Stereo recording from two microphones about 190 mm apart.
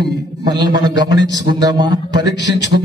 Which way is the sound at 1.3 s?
20° right (ahead or behind).